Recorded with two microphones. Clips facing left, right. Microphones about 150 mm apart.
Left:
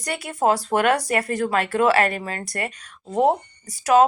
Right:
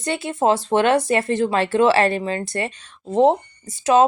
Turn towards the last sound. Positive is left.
turn(degrees=-25)  # may be behind; listen again after turning